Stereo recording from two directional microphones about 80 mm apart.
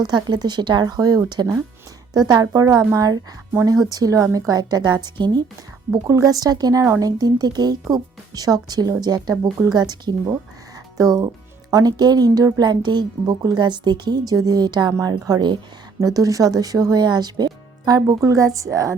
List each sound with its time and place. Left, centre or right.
0.0 s speech: right
2.5 s speech: right
5.9 s a woman's voice: right
16.0 s speech: right